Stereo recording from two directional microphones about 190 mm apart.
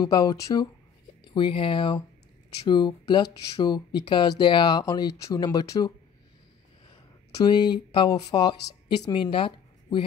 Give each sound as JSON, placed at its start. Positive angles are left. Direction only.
{"t": 0.0, "sound": "speech", "side_deg": 20}